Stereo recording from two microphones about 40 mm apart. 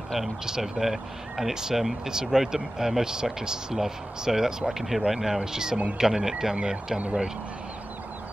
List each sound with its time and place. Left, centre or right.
0.2 s speech: centre